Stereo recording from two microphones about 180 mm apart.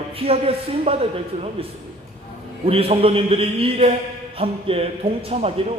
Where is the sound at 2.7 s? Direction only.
30° right (ahead or behind).